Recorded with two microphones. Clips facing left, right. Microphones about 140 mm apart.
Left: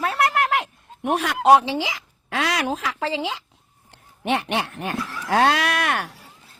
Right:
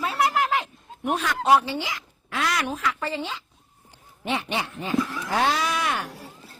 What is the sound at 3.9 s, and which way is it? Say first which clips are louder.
Speech: left 5 dB; 70° left (ahead or behind).